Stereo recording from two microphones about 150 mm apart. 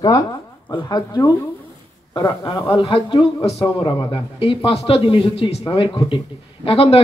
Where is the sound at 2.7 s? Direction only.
35° left (ahead or behind).